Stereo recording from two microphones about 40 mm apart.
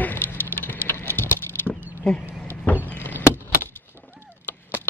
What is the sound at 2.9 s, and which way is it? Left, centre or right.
Vehicle, left.